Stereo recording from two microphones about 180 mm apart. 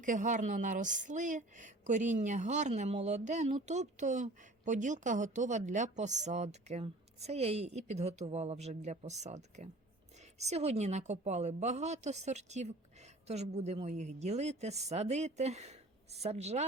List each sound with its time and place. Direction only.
0.0 s a woman's voice: 45° right (ahead or behind)